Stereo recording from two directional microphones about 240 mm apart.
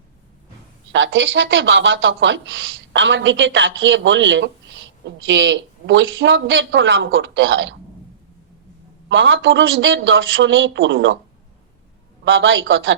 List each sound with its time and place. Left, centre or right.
0.9 s speech: right
9.0 s speech: right
12.2 s speech: right